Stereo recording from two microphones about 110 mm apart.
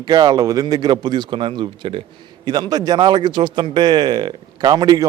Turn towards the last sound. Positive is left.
turn(degrees=-35)  # may be behind; listen again after turning